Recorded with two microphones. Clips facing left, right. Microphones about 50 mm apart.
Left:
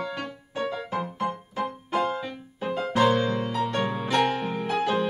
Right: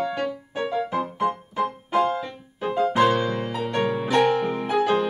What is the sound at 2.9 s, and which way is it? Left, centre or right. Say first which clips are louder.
Music: even; centre.